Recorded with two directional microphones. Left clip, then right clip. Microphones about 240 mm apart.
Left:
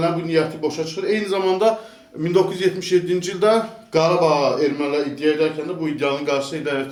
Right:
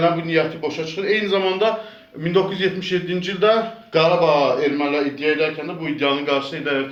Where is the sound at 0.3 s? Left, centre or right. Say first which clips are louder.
Even; left.